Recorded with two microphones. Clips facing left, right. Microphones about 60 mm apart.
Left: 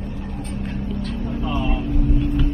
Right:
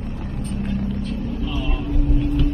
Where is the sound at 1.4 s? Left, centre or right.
Left.